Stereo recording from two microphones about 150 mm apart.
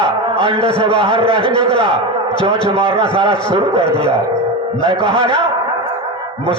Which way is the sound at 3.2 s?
30° left (ahead or behind).